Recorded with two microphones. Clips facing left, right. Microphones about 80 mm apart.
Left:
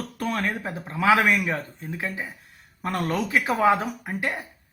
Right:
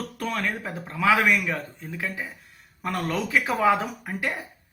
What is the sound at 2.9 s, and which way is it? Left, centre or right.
Speech, centre.